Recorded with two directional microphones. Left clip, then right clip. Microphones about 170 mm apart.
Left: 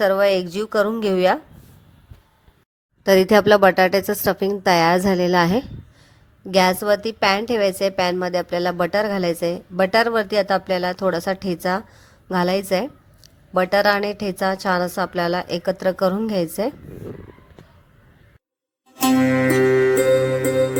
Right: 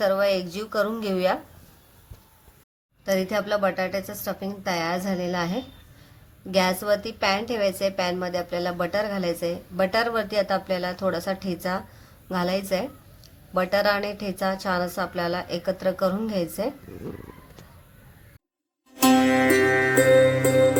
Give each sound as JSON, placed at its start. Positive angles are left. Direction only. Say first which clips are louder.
{"t": 0.0, "sound": "a woman's voice", "louder": "left 5 dB", "side_deg": 45}
{"t": 3.0, "sound": "a woman's voice", "louder": "left 11 dB", "side_deg": 50}
{"t": 18.9, "sound": "music", "louder": "left 1 dB", "side_deg": 0}